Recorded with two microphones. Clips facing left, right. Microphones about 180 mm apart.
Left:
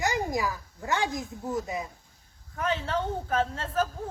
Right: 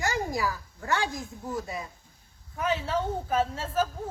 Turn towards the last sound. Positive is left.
turn(degrees=-5)  # may be behind; listen again after turning